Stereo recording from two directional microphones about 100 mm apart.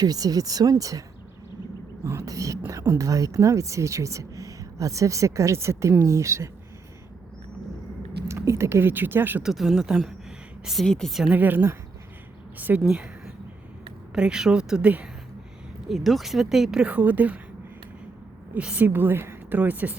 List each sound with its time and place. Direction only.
0.0 s speech: 40° right (ahead or behind)
2.0 s speech: 30° right (ahead or behind)
8.3 s a woman's voice: 30° right (ahead or behind)
9.4 s speech: centre (ahead or behind)
11.3 s a woman's voice: 20° right (ahead or behind)
15.9 s speech: centre (ahead or behind); by 17.4 s 15° right (ahead or behind)
18.5 s a woman's voice: 15° right (ahead or behind)